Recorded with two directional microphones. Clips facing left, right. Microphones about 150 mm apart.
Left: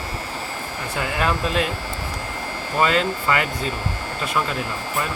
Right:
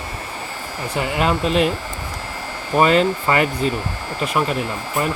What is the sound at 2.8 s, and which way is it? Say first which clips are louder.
Speech: right 5 dB; 25° right (ahead or behind).